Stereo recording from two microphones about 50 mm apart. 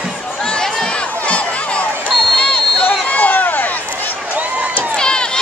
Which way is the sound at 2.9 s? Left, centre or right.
Left.